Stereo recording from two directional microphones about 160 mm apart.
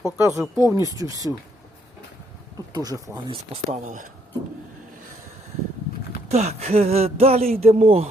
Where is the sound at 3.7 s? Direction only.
55° right (ahead or behind).